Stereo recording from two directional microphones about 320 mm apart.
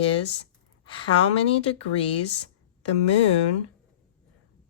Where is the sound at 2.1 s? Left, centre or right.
Left.